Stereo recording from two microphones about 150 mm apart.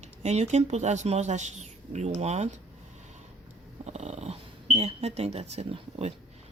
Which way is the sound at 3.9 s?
45° right (ahead or behind).